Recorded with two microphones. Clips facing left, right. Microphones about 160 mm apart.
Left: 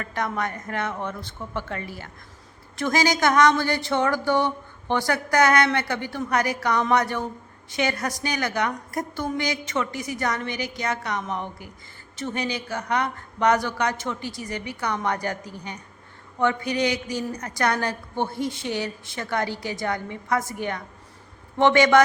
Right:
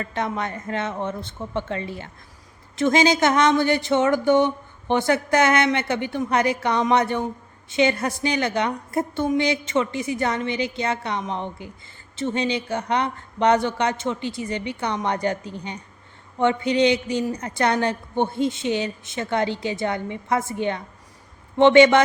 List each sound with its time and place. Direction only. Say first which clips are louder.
0.0 s a woman's voice: right 1 dB; 25° right (ahead or behind)